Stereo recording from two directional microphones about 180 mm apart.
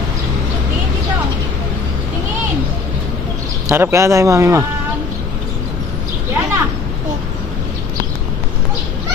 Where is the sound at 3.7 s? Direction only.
15° right (ahead or behind).